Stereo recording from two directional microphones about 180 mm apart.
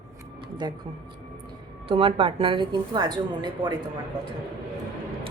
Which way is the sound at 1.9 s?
30° right (ahead or behind).